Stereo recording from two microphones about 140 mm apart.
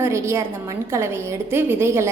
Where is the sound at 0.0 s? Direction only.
20° right (ahead or behind).